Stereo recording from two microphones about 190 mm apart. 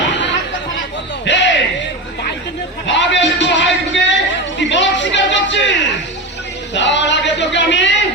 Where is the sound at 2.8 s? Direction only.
70° left (ahead or behind).